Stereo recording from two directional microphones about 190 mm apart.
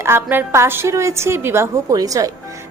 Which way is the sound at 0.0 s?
15° right (ahead or behind).